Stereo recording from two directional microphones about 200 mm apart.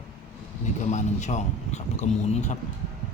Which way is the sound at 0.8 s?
35° left (ahead or behind).